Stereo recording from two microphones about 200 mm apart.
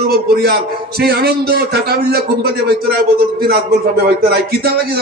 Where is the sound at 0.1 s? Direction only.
50° right (ahead or behind).